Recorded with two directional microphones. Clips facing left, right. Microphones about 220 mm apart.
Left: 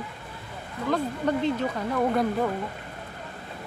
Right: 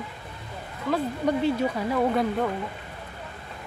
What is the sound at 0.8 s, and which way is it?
Speech, 5° right (ahead or behind).